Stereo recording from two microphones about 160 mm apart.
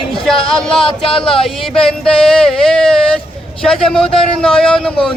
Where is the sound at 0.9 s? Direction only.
30° left (ahead or behind).